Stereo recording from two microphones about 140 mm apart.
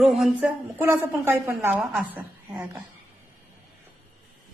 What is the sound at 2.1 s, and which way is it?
Speech, 20° right (ahead or behind).